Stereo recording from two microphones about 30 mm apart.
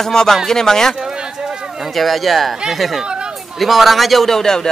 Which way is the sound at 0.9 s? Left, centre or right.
Right.